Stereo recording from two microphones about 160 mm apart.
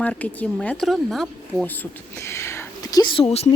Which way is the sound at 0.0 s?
10° left (ahead or behind).